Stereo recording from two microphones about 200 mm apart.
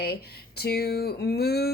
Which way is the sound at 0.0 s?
50° left (ahead or behind).